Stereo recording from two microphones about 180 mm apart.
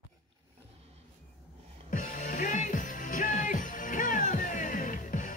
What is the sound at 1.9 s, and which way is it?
Music, 45° left (ahead or behind).